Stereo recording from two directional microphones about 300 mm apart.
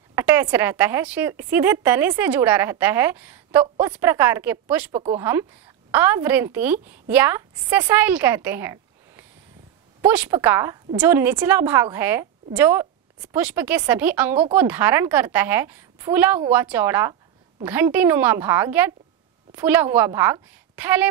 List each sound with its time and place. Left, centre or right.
0.1 s a woman's voice: centre
3.6 s a woman's voice: centre
4.9 s a woman's voice: centre
5.2 s a woman's voice: centre